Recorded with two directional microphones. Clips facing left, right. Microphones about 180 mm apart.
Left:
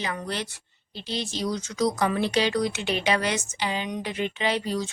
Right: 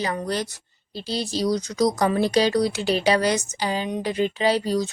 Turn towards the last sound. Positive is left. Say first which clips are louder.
# right 5 dB
turn(degrees=-40)  # may be behind; listen again after turning